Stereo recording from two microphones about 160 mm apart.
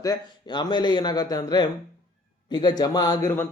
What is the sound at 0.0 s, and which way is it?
Speech, 25° left (ahead or behind).